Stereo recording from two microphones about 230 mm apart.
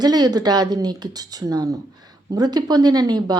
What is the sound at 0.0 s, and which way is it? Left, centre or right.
Speech, centre.